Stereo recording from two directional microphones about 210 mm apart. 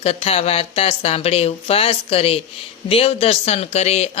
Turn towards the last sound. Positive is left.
turn(degrees=30)  # may be behind; listen again after turning